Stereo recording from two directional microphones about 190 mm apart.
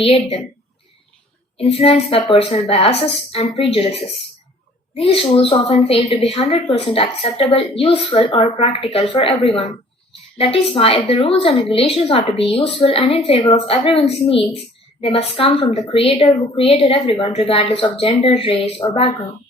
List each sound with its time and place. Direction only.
0.0 s a woman's voice: 30° left (ahead or behind)
1.5 s a woman's voice: 30° left (ahead or behind)